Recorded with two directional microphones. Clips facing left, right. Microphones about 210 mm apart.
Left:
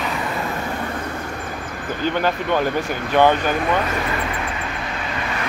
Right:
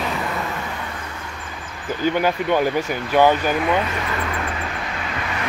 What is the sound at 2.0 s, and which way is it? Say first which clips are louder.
Speech: right 2 dB; 10° right (ahead or behind).